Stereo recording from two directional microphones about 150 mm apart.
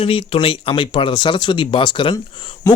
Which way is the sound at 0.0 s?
35° left (ahead or behind).